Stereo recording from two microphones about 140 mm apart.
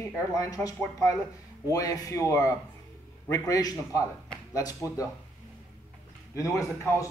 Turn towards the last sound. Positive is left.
turn(degrees=25)  # may be behind; listen again after turning